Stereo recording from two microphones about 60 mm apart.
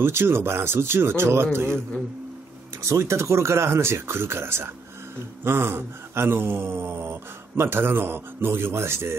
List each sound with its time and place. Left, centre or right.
0.0 s speech: right
2.8 s speech: right